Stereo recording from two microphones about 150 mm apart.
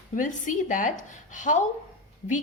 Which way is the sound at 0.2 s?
60° left (ahead or behind).